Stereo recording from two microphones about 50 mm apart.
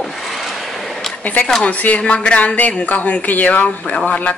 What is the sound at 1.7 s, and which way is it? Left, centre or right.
Speech, left.